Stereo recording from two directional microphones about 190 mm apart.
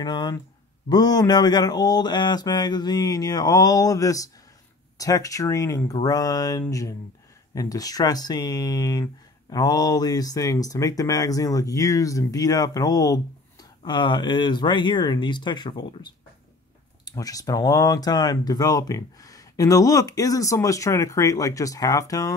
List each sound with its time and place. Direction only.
0.0 s speech: 20° left (ahead or behind)